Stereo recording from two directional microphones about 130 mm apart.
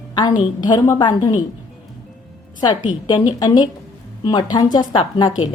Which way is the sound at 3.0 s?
35° left (ahead or behind).